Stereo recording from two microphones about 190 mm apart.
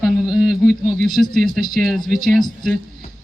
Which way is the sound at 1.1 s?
Centre (ahead or behind).